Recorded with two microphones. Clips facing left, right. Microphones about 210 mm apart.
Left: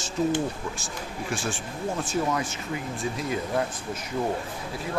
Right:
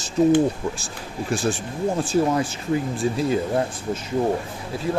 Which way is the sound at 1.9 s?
30° right (ahead or behind).